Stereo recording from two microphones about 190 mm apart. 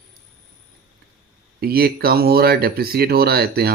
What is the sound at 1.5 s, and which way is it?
Speech, 55° right (ahead or behind).